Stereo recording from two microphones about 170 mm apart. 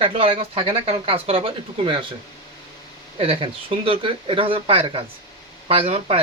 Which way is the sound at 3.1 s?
35° right (ahead or behind).